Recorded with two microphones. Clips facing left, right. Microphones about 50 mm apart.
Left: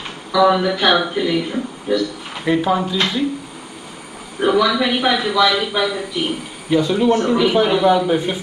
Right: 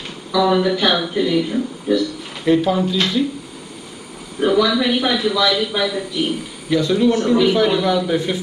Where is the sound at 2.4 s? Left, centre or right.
Centre.